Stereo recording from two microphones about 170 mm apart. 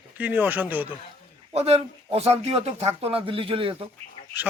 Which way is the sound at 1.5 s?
40° right (ahead or behind).